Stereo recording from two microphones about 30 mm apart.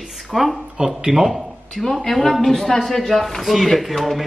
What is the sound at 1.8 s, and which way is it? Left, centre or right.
A man's voice, centre.